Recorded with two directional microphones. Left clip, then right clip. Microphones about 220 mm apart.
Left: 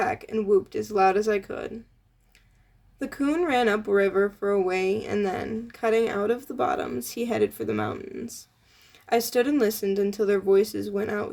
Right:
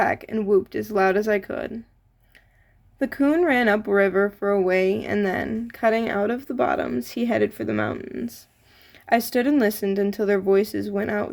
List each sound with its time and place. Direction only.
0.0 s speech: 30° right (ahead or behind)
3.0 s speech: 30° right (ahead or behind)